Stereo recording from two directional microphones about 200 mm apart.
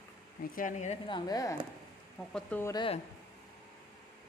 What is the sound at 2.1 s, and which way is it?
Speech, 5° left (ahead or behind).